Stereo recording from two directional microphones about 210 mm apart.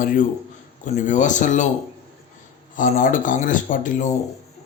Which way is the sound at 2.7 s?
40° left (ahead or behind).